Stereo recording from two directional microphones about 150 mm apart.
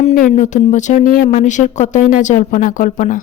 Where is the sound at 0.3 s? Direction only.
50° left (ahead or behind).